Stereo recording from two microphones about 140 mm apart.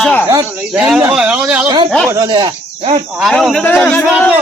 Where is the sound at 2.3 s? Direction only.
35° right (ahead or behind).